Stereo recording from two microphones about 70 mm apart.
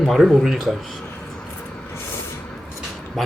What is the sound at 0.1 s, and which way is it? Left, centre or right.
Speech, centre.